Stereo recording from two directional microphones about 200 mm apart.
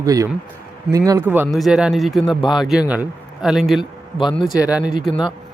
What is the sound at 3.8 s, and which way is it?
Speech, 25° left (ahead or behind).